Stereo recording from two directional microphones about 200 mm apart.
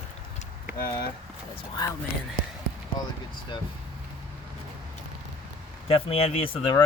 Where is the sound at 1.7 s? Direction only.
20° left (ahead or behind).